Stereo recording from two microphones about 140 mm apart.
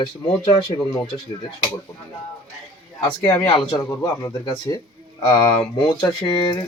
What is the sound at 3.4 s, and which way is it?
Speech, 30° left (ahead or behind).